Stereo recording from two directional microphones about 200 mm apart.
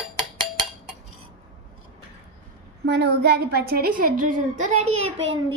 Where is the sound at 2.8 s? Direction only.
55° right (ahead or behind); by 5.0 s 35° right (ahead or behind).